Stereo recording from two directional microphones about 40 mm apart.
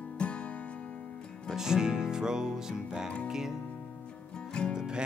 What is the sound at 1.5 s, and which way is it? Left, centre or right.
Music, centre.